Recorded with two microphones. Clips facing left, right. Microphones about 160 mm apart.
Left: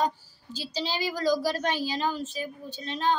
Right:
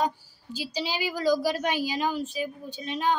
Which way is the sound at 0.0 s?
10° right (ahead or behind).